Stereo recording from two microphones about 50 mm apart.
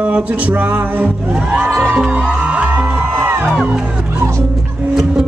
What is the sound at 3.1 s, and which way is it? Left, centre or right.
Music, right.